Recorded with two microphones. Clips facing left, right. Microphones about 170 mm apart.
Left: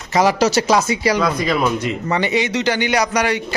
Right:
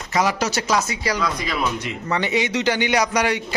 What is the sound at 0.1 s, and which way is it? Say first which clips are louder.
Speech: left 6 dB; 35° left (ahead or behind).